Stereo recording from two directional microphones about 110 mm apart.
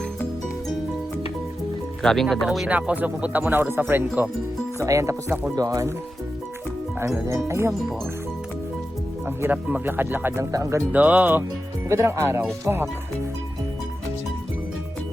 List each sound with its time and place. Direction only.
2.0 s speech: 5° left (ahead or behind)
2.6 s speech: 15° right (ahead or behind)
4.8 s speech: 30° right (ahead or behind)
7.3 s speech: 25° right (ahead or behind)
9.2 s speech: 15° right (ahead or behind)
10.9 s speech: 15° right (ahead or behind)